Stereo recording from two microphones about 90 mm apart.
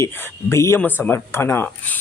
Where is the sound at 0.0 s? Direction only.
30° left (ahead or behind).